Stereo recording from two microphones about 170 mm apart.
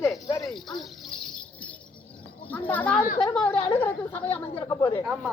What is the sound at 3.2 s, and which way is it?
Speech, 25° left (ahead or behind).